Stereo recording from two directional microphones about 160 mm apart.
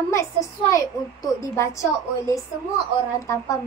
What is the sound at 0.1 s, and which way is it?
A child's voice, 20° left (ahead or behind).